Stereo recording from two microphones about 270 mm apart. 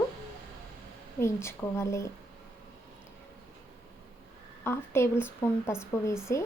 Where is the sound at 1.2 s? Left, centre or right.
Centre.